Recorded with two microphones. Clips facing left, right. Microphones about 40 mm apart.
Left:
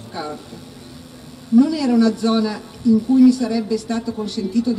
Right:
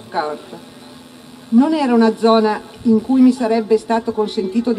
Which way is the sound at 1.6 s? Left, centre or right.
Right.